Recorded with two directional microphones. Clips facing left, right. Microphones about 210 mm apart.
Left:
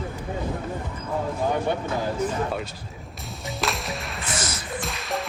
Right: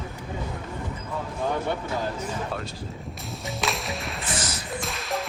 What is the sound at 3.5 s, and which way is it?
Whip, centre (ahead or behind).